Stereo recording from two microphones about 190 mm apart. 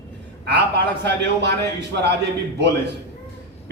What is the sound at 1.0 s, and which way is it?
Speech, 65° right (ahead or behind).